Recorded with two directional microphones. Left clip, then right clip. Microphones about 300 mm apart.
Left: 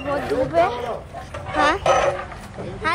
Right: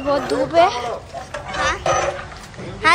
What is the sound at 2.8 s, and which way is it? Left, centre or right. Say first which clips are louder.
Vehicle: right 8 dB; centre.